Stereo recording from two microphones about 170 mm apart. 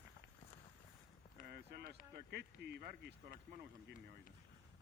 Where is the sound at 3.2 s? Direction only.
55° right (ahead or behind).